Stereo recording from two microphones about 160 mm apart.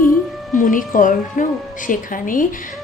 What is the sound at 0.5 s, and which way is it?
A woman's voice, 55° left (ahead or behind).